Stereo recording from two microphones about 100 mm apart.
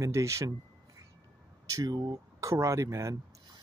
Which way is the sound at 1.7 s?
40° right (ahead or behind).